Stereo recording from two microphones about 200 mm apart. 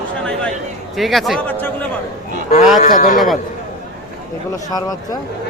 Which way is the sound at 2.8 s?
40° left (ahead or behind).